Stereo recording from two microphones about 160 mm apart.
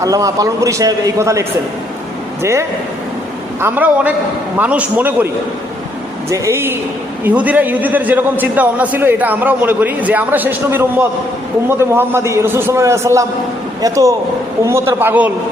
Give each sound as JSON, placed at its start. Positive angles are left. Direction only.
{"t": 0.0, "sound": "a man's voice", "side_deg": -20}
{"t": 6.3, "sound": "a man's voice", "side_deg": -15}